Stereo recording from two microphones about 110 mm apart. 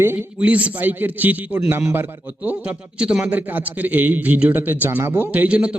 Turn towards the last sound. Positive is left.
turn(degrees=-10)  # may be behind; listen again after turning